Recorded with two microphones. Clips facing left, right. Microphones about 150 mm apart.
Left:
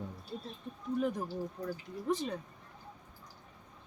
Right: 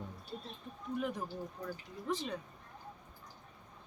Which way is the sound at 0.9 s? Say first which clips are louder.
Left 4 dB; 40° left (ahead or behind).